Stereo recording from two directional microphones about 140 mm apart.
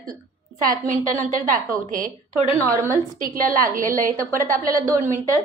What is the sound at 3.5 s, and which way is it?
A woman's voice, 75° right (ahead or behind).